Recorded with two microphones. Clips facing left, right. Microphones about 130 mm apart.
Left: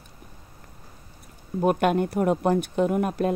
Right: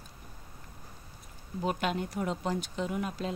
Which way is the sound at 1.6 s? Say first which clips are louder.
Left 10 dB; 55° left (ahead or behind).